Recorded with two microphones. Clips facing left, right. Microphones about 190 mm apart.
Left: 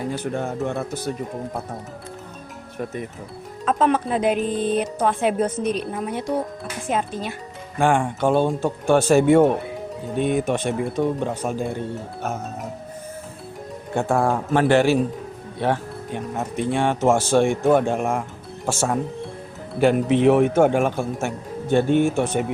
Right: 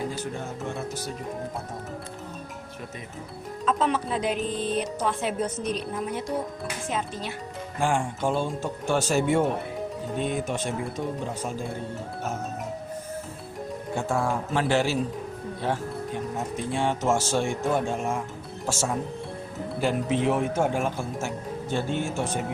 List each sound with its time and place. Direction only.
0.3 s speech: 60° left (ahead or behind)
3.7 s speech: 55° left (ahead or behind)
6.9 s speech: 50° left (ahead or behind)
13.9 s speech: 60° left (ahead or behind)